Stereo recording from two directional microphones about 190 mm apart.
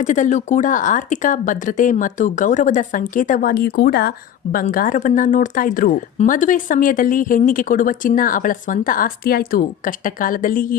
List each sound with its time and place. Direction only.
0.0 s speech: 40° left (ahead or behind)